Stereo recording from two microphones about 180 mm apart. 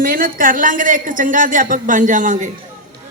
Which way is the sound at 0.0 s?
50° right (ahead or behind).